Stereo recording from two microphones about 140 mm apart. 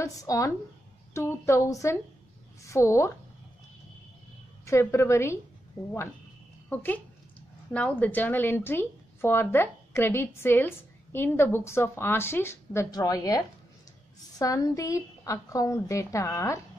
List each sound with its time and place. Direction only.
0.0 s a woman's voice: 25° left (ahead or behind)
4.6 s a woman's voice: 20° left (ahead or behind)
6.7 s a woman's voice: 10° left (ahead or behind)
14.4 s a woman's voice: 25° left (ahead or behind)